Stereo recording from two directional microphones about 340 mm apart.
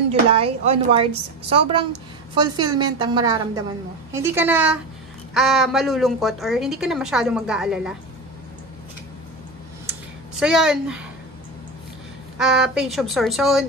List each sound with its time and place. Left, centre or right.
0.3 s a woman's voice: centre
10.4 s a woman's voice: centre
12.4 s a woman's voice: centre